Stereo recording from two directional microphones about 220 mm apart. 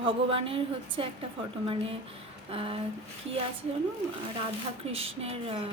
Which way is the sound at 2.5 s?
25° right (ahead or behind).